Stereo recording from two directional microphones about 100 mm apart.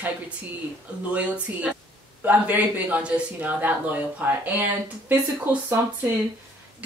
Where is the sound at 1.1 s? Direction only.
15° right (ahead or behind).